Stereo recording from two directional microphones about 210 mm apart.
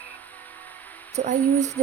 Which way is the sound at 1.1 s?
35° right (ahead or behind).